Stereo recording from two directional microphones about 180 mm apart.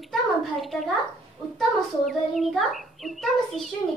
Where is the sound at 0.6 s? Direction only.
Centre (ahead or behind).